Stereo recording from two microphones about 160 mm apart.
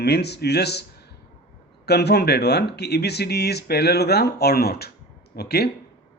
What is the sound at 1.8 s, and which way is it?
Speech, 90° left.